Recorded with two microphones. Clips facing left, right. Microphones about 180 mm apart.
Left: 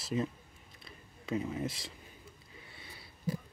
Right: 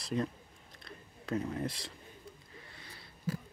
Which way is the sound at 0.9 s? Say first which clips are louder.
Even; 5° left (ahead or behind).